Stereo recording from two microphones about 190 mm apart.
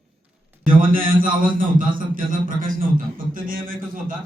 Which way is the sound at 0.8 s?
45° right (ahead or behind).